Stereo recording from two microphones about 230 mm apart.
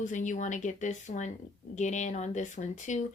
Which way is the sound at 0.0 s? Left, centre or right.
Left.